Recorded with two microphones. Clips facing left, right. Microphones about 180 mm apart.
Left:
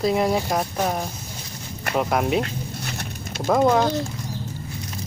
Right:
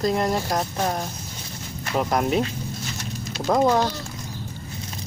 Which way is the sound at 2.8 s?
60° left (ahead or behind).